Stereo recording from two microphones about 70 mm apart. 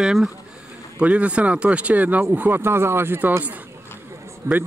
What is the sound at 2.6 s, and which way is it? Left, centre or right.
Speech, right.